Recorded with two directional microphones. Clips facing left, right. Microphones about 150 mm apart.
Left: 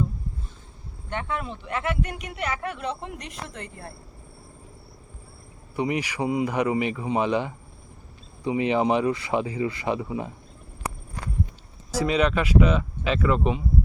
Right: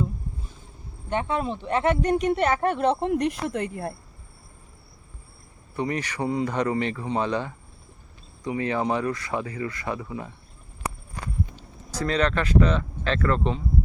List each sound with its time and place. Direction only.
1.1 s speech: 25° right (ahead or behind)
2.0 s speech: 40° right (ahead or behind)
5.7 s speech: 10° left (ahead or behind)
11.9 s speech: 10° left (ahead or behind)